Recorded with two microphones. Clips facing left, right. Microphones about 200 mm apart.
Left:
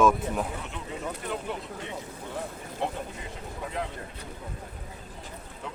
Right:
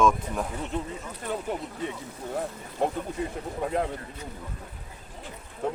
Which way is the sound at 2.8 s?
45° right (ahead or behind).